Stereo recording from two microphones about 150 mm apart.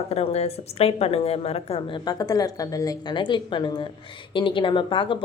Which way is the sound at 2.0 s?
25° left (ahead or behind).